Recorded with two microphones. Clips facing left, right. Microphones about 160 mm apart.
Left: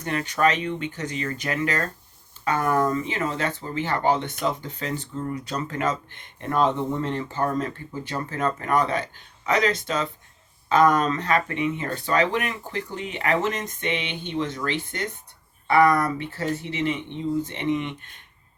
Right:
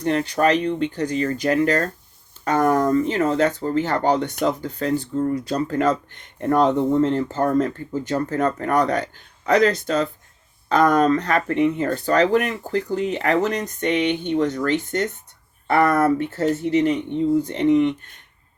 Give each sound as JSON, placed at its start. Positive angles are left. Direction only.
{"t": 0.0, "sound": "speech", "side_deg": -35}